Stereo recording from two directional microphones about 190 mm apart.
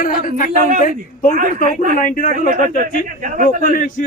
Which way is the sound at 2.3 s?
45° right (ahead or behind).